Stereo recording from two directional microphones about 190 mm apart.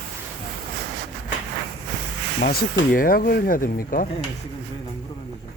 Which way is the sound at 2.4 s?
50° left (ahead or behind).